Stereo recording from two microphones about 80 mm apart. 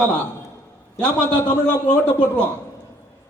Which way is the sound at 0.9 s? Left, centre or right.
Left.